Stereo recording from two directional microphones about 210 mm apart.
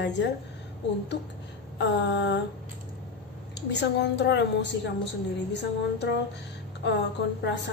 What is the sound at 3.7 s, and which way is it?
A woman's voice, 55° left (ahead or behind).